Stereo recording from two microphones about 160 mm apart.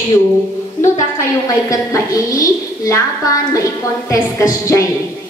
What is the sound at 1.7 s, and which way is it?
A woman's voice, 20° left (ahead or behind).